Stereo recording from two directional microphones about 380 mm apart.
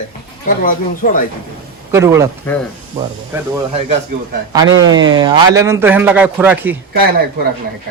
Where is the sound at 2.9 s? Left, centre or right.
Centre.